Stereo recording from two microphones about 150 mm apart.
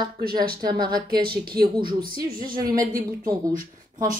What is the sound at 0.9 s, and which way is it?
Speech, 90° right.